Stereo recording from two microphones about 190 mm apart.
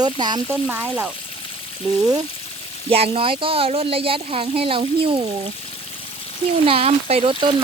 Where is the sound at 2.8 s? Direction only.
30° right (ahead or behind).